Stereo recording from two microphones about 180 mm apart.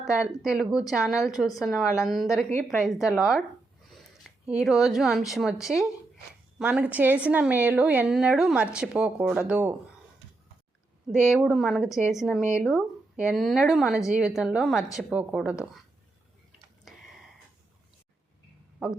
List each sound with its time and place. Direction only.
0.0 s a woman's voice: 5° right (ahead or behind)
11.1 s speech: 5° right (ahead or behind)